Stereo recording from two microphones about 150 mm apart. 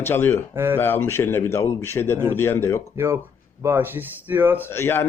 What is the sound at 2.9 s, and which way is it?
A man's voice, 15° right (ahead or behind).